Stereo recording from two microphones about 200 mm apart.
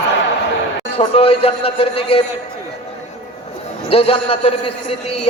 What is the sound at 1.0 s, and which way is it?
A man's voice, 30° left (ahead or behind).